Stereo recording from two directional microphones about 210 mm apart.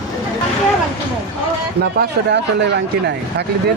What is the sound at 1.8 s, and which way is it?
Speech, 50° right (ahead or behind).